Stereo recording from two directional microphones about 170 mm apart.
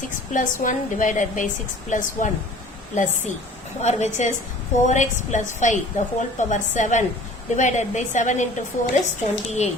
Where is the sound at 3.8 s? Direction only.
40° left (ahead or behind).